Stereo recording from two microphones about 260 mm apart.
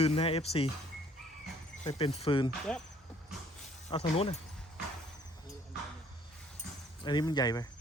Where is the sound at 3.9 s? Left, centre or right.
Left.